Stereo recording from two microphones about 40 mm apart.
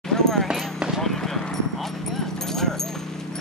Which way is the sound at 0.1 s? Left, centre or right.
Centre.